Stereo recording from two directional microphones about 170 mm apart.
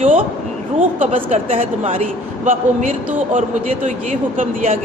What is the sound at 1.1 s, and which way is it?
A man's voice, 35° right (ahead or behind).